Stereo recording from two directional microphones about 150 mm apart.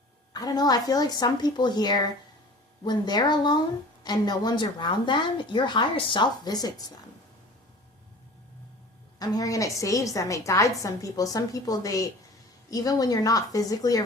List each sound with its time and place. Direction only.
0.3 s a woman's voice: 25° left (ahead or behind)
9.1 s a woman's voice: 25° left (ahead or behind)